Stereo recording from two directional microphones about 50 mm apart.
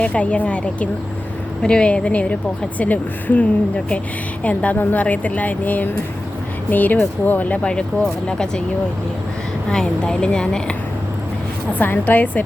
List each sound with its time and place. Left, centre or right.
0.0 s a woman's voice: left
4.4 s speech: left
7.6 s a woman's voice: centre
9.6 s a woman's voice: centre
11.8 s speech: left